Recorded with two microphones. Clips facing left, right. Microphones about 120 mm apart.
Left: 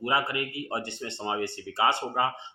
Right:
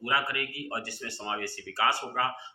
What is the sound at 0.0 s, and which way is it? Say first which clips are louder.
Speech: left 3 dB; 25° left (ahead or behind).